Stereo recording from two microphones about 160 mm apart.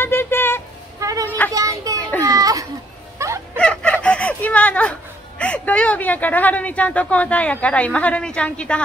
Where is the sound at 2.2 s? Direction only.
20° right (ahead or behind).